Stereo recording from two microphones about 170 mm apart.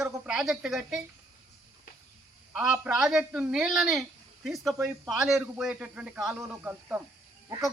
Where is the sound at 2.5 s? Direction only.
5° right (ahead or behind).